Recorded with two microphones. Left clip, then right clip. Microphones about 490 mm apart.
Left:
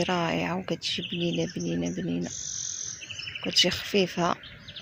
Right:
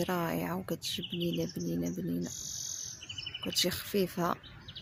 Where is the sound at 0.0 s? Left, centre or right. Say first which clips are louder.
Left 6 dB; left.